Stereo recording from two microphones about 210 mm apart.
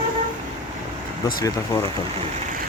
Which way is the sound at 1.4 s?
20° left (ahead or behind).